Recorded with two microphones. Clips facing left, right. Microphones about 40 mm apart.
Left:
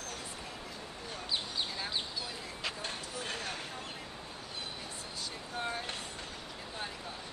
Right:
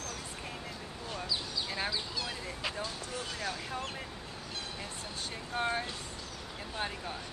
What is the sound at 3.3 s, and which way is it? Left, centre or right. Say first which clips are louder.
Vehicle: right 3 dB; right.